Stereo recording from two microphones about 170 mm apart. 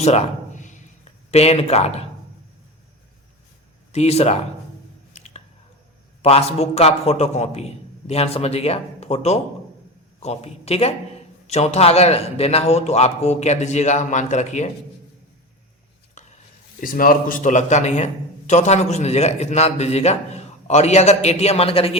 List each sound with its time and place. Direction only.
0.0 s a sound: 40° left (ahead or behind)
1.3 s a man's voice: 40° left (ahead or behind)
3.9 s a man's voice: 40° left (ahead or behind)
5.1 s chewing: 40° left (ahead or behind)
6.2 s a man's voice: 35° left (ahead or behind)
16.2 s stir: 45° left (ahead or behind)
16.8 s a man's voice: 55° left (ahead or behind); by 21.9 s 35° left (ahead or behind)